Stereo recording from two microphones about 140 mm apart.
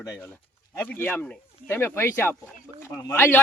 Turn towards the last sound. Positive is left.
turn(degrees=15)  # may be behind; listen again after turning